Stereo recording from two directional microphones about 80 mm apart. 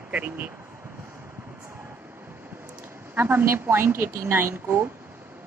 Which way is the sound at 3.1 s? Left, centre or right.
Right.